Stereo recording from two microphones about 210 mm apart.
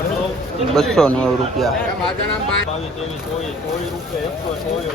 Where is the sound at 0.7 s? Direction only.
Centre (ahead or behind).